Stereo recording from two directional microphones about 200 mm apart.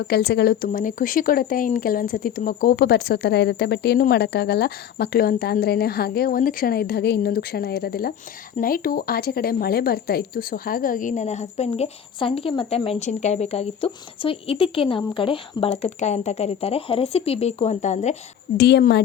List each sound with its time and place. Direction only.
0.1 s speech: 55° left (ahead or behind); by 18.2 s 35° left (ahead or behind)
18.5 s a woman's voice: 50° left (ahead or behind)